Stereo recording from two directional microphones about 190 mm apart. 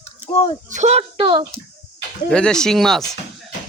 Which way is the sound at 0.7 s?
35° right (ahead or behind).